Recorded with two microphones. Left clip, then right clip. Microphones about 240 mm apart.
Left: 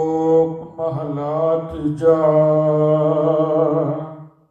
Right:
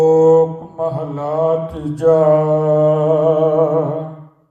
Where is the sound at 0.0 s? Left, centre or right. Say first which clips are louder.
Right 6 dB; right.